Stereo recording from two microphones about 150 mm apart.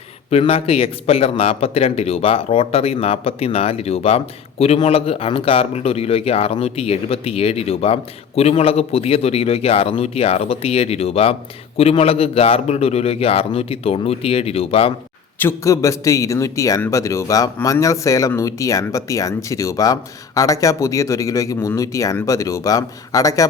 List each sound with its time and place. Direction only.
0.3 s a man's voice: 40° left (ahead or behind)
15.4 s a man's voice: 20° left (ahead or behind)